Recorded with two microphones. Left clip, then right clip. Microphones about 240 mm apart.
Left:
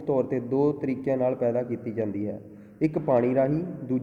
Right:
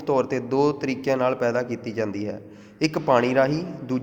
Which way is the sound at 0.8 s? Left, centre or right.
Right.